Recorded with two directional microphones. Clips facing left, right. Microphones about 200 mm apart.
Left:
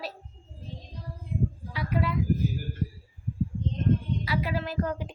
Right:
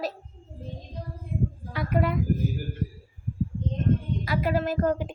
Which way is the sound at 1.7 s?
50° right (ahead or behind).